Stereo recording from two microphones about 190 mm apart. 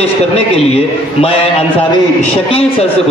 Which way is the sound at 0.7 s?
30° left (ahead or behind).